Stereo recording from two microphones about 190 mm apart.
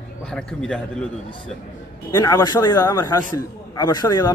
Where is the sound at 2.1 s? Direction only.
20° left (ahead or behind).